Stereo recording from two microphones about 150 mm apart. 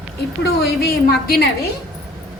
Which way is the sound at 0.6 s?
90° left.